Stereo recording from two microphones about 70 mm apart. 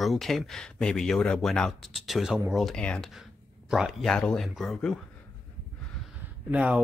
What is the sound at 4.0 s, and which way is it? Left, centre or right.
Speech, centre.